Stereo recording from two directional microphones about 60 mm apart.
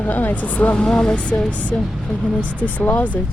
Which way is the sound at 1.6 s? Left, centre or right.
Left.